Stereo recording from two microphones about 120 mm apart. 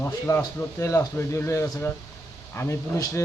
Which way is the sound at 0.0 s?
20° left (ahead or behind).